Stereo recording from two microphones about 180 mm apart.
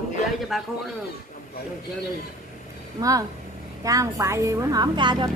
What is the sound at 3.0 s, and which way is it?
A woman's voice, 20° right (ahead or behind).